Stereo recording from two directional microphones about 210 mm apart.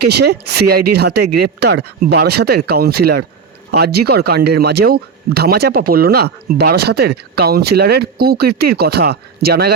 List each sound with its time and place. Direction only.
0.0 s speech: 50° right (ahead or behind)